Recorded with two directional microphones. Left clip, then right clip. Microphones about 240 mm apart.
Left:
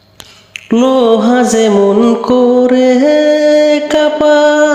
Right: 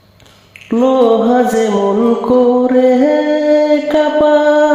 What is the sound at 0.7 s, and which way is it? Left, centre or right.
Music, left.